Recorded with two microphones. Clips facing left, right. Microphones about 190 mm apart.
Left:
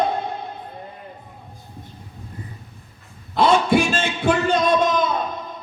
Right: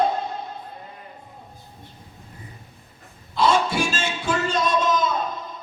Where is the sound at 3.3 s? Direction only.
60° left (ahead or behind).